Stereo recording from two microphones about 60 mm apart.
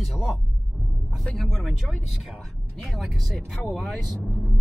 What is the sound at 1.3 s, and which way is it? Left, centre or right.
Speech, centre.